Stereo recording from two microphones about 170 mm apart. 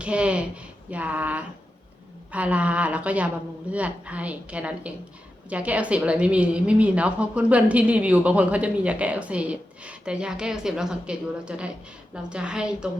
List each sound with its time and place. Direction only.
0.0 s a woman's voice: 5° right (ahead or behind)